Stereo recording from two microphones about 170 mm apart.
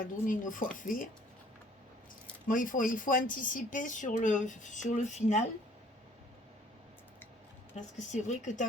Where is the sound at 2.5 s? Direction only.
50° left (ahead or behind).